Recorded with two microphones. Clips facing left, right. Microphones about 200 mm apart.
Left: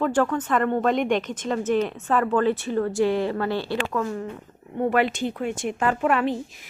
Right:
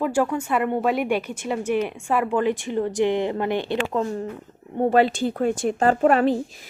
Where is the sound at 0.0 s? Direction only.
10° right (ahead or behind).